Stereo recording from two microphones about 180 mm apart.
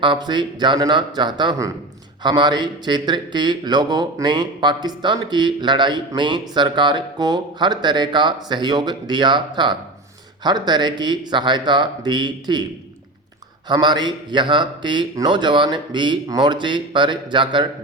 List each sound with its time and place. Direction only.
0.0 s speech: 25° right (ahead or behind)
13.7 s speech: 25° right (ahead or behind)